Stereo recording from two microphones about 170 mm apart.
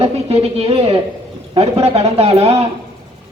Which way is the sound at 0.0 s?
35° right (ahead or behind).